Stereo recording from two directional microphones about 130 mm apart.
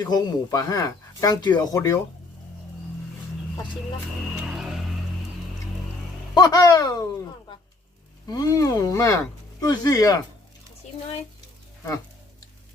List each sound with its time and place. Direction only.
0.0 s speech: 35° left (ahead or behind)
4.4 s music: 5° right (ahead or behind)
6.3 s speech: 30° left (ahead or behind)
8.3 s speech: 30° left (ahead or behind)